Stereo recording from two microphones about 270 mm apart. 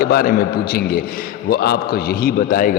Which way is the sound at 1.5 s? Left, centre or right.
Left.